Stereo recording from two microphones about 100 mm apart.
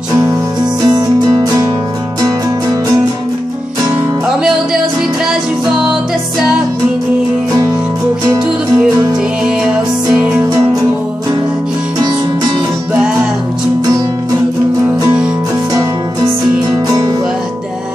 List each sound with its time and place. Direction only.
0.8 s music: 40° right (ahead or behind)
9.7 s music: 10° right (ahead or behind)
16.8 s music: 40° right (ahead or behind)